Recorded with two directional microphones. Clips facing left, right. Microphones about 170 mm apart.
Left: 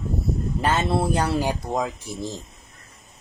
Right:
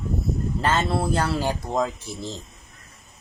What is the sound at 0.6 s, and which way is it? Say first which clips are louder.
Speech: left 1 dB; 15° left (ahead or behind).